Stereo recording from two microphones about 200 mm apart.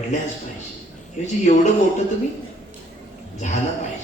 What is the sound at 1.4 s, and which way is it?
Speech, 35° left (ahead or behind).